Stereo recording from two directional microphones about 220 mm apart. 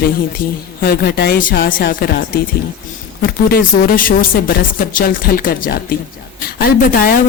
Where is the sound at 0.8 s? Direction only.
45° left (ahead or behind).